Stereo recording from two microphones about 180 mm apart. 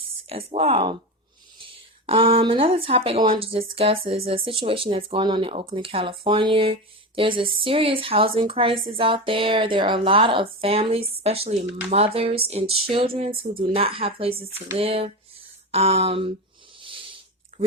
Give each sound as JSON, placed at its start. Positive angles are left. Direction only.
{"t": 0.3, "sound": "speech", "side_deg": -30}
{"t": 2.0, "sound": "a woman's voice", "side_deg": -30}
{"t": 16.8, "sound": "a sound", "side_deg": -30}